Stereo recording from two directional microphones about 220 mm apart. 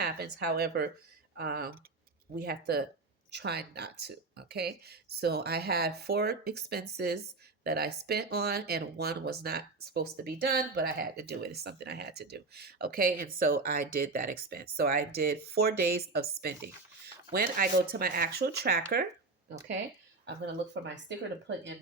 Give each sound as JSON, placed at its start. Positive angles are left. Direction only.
{"t": 0.3, "sound": "speech", "side_deg": -45}
{"t": 20.2, "sound": "speech", "side_deg": -50}